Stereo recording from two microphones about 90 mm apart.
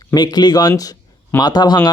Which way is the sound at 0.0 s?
45° left (ahead or behind).